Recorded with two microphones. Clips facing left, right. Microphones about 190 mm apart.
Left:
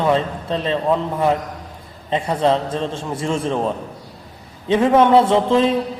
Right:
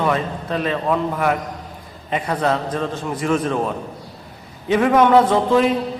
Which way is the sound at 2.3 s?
25° left (ahead or behind).